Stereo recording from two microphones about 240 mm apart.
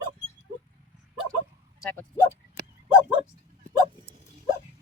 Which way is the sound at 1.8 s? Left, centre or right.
Centre.